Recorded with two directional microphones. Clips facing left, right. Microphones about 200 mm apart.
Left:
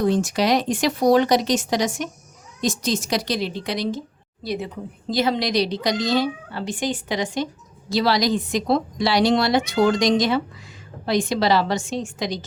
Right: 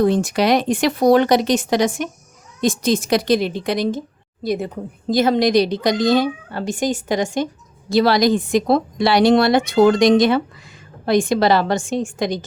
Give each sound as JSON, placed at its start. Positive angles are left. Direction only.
{"t": 0.0, "sound": "a woman's voice", "side_deg": -55}